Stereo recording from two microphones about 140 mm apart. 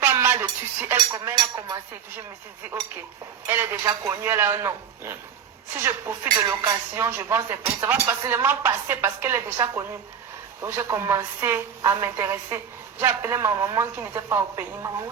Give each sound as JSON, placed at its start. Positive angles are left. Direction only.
{"t": 0.0, "sound": "dishes", "side_deg": -15}
{"t": 0.9, "sound": "a sound", "side_deg": -25}
{"t": 3.4, "sound": "a woman's voice", "side_deg": -15}